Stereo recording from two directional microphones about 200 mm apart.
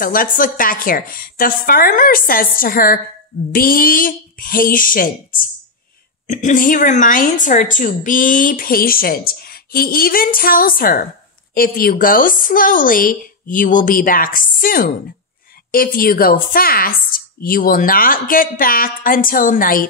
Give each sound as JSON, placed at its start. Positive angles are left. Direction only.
{"t": 0.0, "sound": "a woman's voice", "side_deg": 45}